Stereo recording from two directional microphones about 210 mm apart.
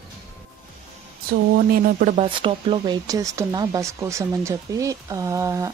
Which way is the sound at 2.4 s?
25° right (ahead or behind).